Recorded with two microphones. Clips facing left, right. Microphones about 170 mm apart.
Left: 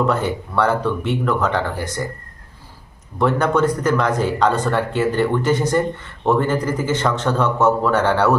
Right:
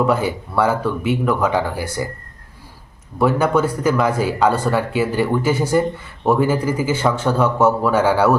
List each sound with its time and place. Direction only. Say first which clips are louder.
0.0 s speech: right 1 dB; 10° right (ahead or behind)
3.2 s speech: right 1 dB; 5° right (ahead or behind)